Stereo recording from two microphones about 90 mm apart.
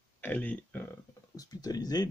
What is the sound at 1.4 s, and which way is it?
Speech, 45° left (ahead or behind).